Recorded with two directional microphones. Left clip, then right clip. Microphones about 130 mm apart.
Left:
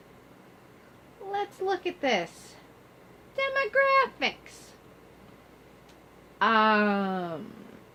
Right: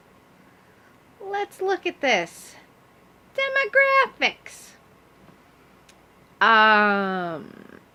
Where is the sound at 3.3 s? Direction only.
45° right (ahead or behind).